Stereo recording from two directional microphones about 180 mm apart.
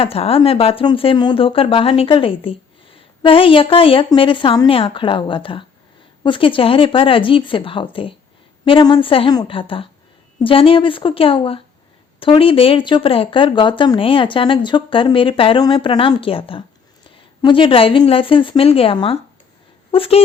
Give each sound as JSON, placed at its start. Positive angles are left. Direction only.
{"t": 0.0, "sound": "speech", "side_deg": 35}